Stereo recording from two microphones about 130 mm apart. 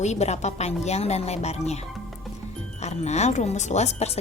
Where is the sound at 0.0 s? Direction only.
60° left (ahead or behind).